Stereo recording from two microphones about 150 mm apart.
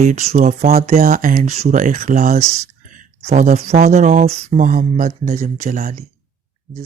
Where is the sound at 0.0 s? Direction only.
50° right (ahead or behind); by 5.4 s 70° right (ahead or behind).